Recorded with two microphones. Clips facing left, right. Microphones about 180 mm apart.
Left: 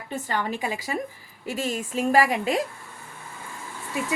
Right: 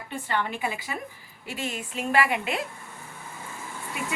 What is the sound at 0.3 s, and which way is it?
A woman's voice, 40° left (ahead or behind).